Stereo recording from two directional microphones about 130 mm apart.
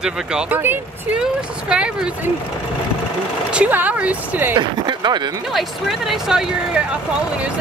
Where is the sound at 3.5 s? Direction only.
10° right (ahead or behind).